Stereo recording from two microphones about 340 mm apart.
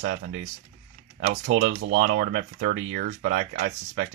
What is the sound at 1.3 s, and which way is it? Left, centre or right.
Speech, right.